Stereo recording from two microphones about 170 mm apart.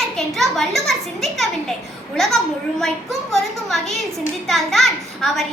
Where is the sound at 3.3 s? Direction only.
Centre (ahead or behind).